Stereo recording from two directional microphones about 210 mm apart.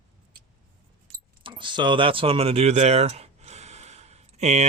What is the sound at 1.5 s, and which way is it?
Speech, 25° right (ahead or behind).